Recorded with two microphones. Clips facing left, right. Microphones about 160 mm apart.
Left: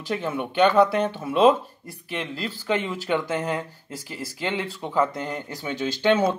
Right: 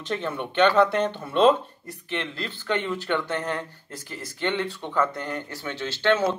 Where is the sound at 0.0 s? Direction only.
5° left (ahead or behind).